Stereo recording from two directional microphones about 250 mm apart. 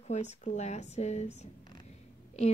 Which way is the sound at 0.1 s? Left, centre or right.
Left.